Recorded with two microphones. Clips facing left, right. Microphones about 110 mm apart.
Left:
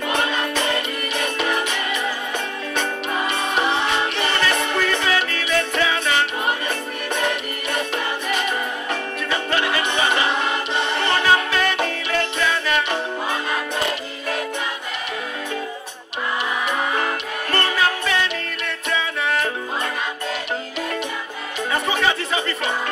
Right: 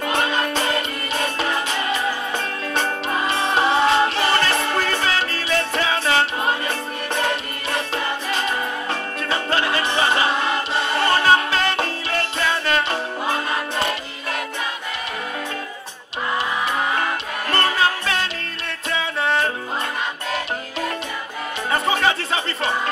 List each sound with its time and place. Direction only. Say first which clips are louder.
1.1 s music: even; 30° right (ahead or behind)
3.3 s music: right 3 dB; 30° right (ahead or behind)
7.7 s music: even; 30° right (ahead or behind)
11.2 s music: right 1 dB; 30° right (ahead or behind)
17.5 s music: right 1 dB; 35° right (ahead or behind)
22.0 s chatter: even; 30° right (ahead or behind)